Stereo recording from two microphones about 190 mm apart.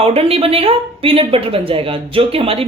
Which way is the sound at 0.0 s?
30° right (ahead or behind).